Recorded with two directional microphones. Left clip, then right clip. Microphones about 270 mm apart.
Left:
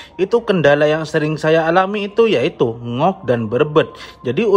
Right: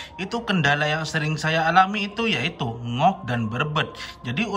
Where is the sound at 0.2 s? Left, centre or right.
Centre.